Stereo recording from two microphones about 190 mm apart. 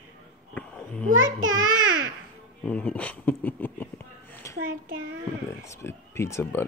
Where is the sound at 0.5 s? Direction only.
5° left (ahead or behind).